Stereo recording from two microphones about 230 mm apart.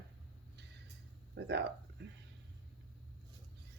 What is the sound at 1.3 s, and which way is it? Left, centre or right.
Speech, right.